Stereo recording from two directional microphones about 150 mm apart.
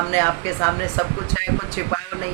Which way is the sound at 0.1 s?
15° left (ahead or behind).